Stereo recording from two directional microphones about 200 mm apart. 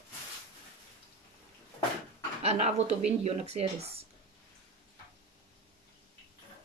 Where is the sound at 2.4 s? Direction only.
35° right (ahead or behind).